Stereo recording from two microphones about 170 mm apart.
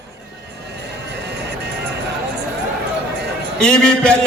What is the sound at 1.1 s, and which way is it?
Music, 80° right.